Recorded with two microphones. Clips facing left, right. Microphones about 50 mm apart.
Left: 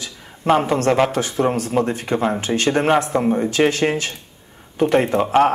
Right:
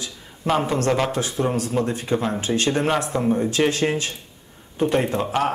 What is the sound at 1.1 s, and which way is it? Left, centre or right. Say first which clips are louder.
Speech: left 4 dB; left.